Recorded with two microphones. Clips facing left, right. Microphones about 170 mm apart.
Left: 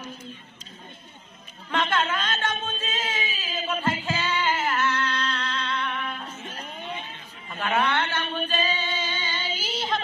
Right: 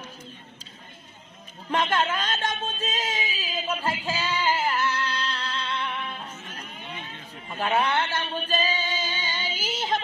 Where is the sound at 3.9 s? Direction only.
35° right (ahead or behind).